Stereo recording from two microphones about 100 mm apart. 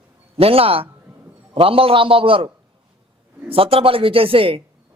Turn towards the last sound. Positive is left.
turn(degrees=-65)  # may be behind; listen again after turning